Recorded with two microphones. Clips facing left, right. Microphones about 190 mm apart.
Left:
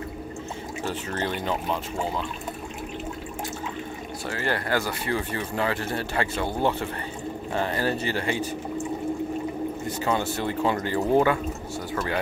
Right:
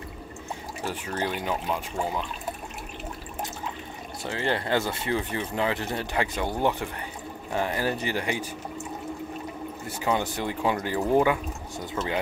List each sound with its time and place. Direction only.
0.8 s speech: 10° right (ahead or behind)
4.3 s speech: 20° right (ahead or behind)
9.8 s speech: 10° right (ahead or behind)